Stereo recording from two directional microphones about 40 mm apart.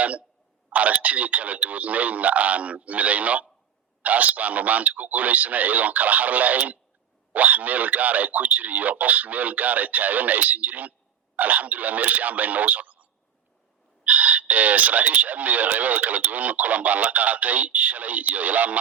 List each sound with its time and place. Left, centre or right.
0.0 s speech: right